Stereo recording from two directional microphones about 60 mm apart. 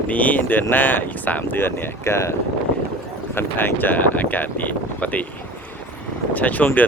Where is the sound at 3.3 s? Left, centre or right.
Left.